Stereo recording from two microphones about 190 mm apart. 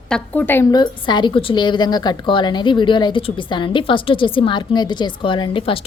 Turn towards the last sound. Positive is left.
turn(degrees=25)  # may be behind; listen again after turning